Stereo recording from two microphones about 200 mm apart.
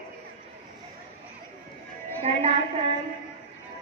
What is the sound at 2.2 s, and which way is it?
Speech, 30° right (ahead or behind).